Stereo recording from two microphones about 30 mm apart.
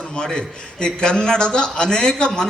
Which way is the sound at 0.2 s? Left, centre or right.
Left.